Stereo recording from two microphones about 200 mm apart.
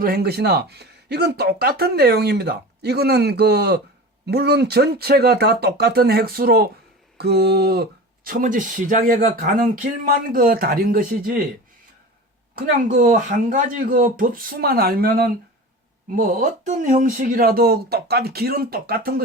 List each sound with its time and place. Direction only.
0.0 s speech: 50° right (ahead or behind)
12.5 s speech: 40° right (ahead or behind)